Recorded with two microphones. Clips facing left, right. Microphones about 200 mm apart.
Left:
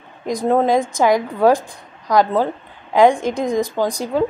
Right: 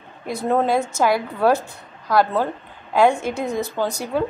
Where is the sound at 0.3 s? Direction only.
10° left (ahead or behind).